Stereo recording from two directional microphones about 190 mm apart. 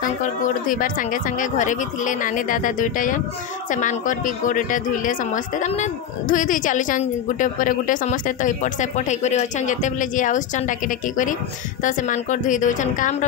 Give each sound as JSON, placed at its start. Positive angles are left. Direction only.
{"t": 0.2, "sound": "speech", "side_deg": 45}
{"t": 11.8, "sound": "a woman's voice", "side_deg": 40}